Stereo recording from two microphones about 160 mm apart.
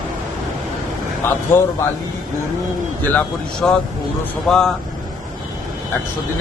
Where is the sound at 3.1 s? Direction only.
5° left (ahead or behind).